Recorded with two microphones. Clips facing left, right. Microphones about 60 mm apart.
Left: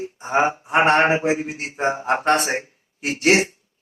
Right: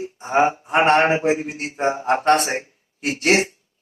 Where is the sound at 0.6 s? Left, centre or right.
Centre.